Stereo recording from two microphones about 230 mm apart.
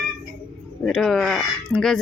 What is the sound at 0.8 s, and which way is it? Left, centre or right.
Speech, centre.